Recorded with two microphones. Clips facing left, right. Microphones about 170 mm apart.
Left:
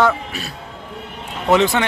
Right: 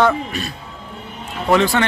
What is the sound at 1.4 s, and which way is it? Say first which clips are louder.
Speech: left 1 dB; 20° left (ahead or behind).